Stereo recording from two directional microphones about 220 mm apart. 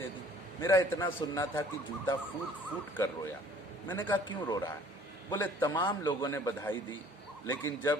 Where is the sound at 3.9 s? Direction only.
15° left (ahead or behind).